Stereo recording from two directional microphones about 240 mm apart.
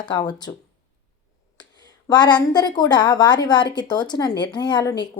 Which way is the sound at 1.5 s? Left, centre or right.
Centre.